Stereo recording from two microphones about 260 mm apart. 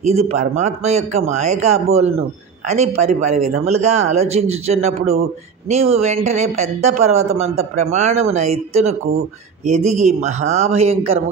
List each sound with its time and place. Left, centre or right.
0.0 s a man's voice: right
9.9 s a man's voice: right